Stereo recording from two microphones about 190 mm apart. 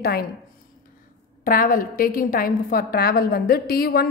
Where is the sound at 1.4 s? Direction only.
45° left (ahead or behind).